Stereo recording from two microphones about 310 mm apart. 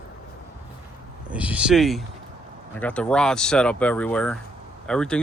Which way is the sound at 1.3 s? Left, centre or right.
Centre.